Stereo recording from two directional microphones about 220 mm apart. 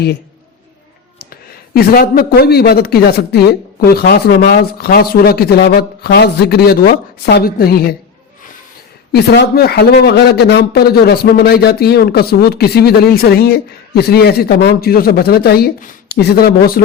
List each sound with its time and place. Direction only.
1.2 s a man's voice: 45° left (ahead or behind)
9.1 s a man's voice: 50° left (ahead or behind)